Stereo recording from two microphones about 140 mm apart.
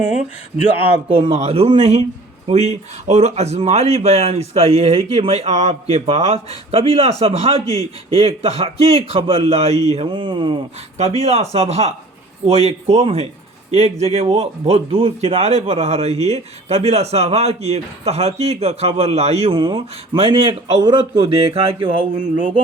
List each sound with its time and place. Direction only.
0.0 s speech: 5° right (ahead or behind)
1.0 s a man's voice: 40° right (ahead or behind)
10.9 s speech: 50° right (ahead or behind)
19.5 s a man's voice: 35° right (ahead or behind)